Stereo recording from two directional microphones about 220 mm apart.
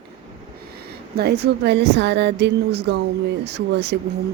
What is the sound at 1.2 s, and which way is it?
A woman's voice, 50° right (ahead or behind).